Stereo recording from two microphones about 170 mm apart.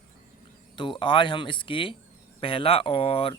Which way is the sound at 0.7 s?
30° left (ahead or behind).